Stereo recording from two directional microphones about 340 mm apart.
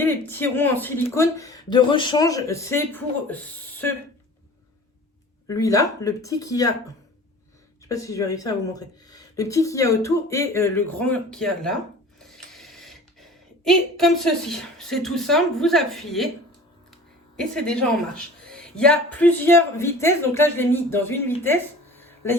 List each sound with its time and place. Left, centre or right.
0.0 s speech: centre
5.5 s speech: centre
7.9 s speech: centre
17.3 s speech: centre
21.4 s a sound: centre